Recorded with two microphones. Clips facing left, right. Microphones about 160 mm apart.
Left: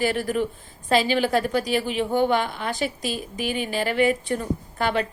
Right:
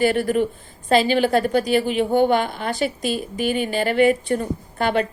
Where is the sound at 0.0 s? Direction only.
Centre (ahead or behind).